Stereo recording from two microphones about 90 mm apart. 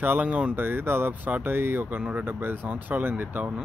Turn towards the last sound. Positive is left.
turn(degrees=-15)  # may be behind; listen again after turning